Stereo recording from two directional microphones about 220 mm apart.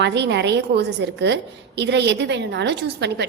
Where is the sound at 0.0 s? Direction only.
50° right (ahead or behind).